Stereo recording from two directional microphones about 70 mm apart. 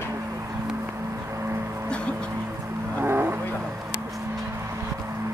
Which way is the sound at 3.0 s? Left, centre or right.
Right.